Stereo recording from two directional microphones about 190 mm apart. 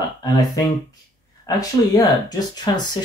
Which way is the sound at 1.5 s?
20° left (ahead or behind).